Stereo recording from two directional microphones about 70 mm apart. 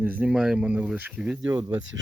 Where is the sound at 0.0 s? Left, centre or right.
Right.